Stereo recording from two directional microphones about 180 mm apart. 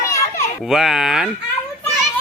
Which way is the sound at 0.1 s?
15° left (ahead or behind).